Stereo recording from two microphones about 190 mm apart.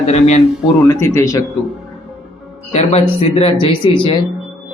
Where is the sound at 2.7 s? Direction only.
30° left (ahead or behind).